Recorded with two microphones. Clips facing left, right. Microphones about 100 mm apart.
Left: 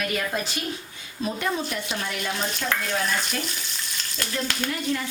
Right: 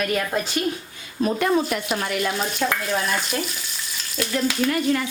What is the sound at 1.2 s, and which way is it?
Speech, 55° right (ahead or behind).